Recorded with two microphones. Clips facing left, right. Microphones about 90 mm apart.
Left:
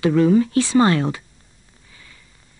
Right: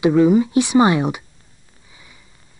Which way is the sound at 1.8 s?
15° right (ahead or behind).